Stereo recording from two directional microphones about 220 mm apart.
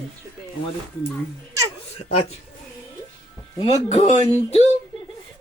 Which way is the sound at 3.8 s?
30° left (ahead or behind).